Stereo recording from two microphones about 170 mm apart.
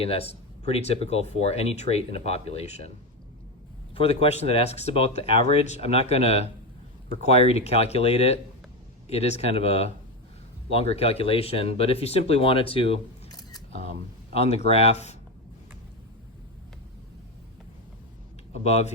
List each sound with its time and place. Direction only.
0.0 s speech: 35° left (ahead or behind)
3.9 s speech: 35° left (ahead or behind)
14.3 s speech: 40° left (ahead or behind)
18.6 s speech: 40° left (ahead or behind)